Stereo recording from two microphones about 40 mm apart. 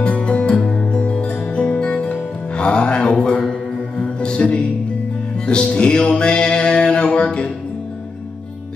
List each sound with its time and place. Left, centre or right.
0.0 s music: left